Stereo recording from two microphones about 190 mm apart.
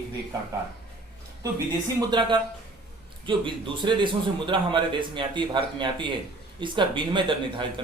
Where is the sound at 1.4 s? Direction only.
20° right (ahead or behind).